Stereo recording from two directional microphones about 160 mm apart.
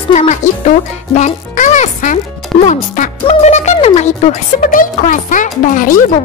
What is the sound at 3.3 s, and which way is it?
Speech, 45° left (ahead or behind).